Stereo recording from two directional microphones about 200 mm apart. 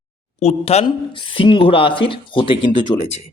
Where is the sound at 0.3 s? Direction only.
30° left (ahead or behind).